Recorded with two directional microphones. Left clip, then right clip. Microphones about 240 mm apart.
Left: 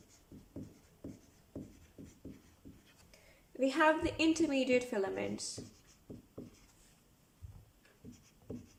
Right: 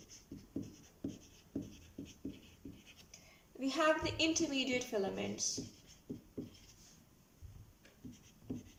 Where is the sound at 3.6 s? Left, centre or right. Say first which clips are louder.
Left 3 dB; left.